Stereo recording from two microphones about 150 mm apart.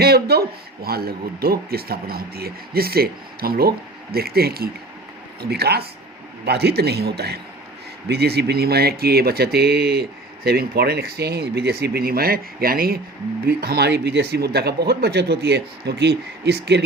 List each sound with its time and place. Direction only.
0.0 s speech: 90° right
13.4 s speech: 90° right